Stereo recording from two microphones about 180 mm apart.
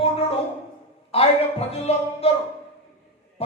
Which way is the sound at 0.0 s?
35° left (ahead or behind).